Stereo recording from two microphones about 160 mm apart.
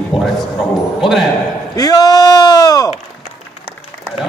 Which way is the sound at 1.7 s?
25° left (ahead or behind).